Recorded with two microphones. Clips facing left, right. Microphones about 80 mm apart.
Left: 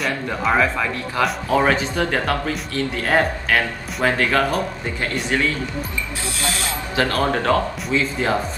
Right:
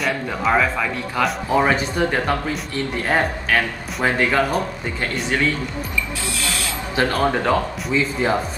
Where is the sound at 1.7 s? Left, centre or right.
Centre.